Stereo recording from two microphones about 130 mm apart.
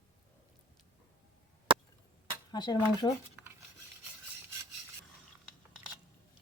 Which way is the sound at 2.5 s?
35° left (ahead or behind).